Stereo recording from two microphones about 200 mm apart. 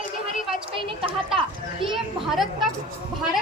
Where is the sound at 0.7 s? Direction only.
25° right (ahead or behind).